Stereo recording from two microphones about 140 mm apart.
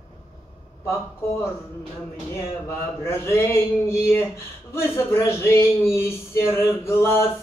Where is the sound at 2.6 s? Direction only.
20° left (ahead or behind).